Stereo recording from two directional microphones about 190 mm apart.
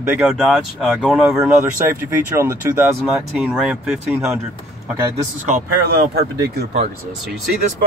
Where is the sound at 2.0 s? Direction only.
15° right (ahead or behind).